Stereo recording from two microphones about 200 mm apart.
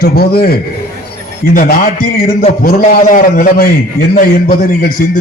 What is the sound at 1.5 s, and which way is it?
A man's voice, 45° left (ahead or behind).